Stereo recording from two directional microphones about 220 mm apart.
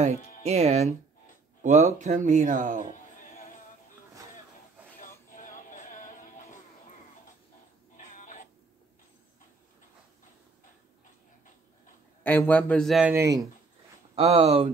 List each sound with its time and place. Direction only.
0.4 s speech: 30° right (ahead or behind)
5.3 s music: 35° left (ahead or behind)
8.0 s a sound: 35° left (ahead or behind)
12.2 s a man's voice: 10° left (ahead or behind); by 13.5 s 15° right (ahead or behind)
14.1 s speech: 25° right (ahead or behind)